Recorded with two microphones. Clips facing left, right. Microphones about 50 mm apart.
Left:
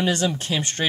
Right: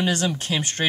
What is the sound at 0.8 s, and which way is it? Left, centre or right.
Speech, centre.